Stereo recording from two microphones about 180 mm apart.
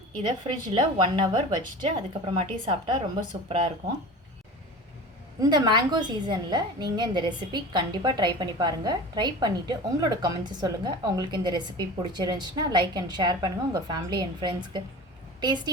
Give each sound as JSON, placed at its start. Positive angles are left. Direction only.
{"t": 0.2, "sound": "a woman's voice", "side_deg": -25}
{"t": 5.4, "sound": "a woman's voice", "side_deg": -25}